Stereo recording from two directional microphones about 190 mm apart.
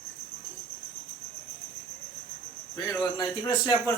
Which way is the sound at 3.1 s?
20° left (ahead or behind).